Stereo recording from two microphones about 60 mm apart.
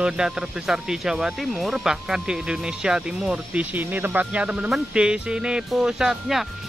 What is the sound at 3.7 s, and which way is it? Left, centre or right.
Speech, right.